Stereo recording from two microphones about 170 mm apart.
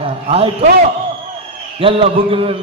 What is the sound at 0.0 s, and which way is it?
Speech, 35° right (ahead or behind).